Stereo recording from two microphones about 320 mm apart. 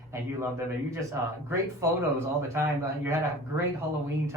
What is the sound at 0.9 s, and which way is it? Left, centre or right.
Speech, centre.